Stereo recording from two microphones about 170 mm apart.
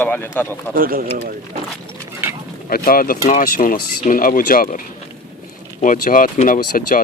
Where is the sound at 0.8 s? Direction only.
60° right (ahead or behind).